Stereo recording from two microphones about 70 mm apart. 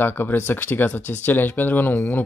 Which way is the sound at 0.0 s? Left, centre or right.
Left.